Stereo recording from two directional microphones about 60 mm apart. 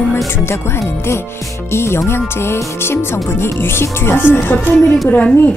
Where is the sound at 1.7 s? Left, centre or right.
Left.